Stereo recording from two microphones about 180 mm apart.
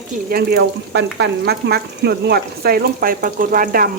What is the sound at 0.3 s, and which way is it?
Speech, 60° right (ahead or behind).